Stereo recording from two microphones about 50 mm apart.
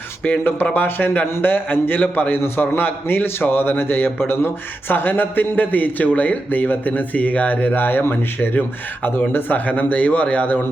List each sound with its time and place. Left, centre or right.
0.3 s a man's voice: left
2.3 s a man's voice: left